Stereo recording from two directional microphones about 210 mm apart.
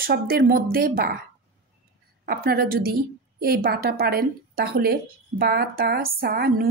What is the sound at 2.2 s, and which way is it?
Speech, 45° right (ahead or behind).